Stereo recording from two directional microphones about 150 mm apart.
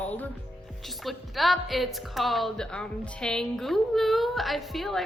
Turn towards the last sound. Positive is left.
turn(degrees=0)  # may be behind; listen again after turning